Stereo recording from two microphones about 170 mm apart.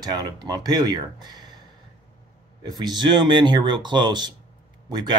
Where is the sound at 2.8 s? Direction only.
25° right (ahead or behind).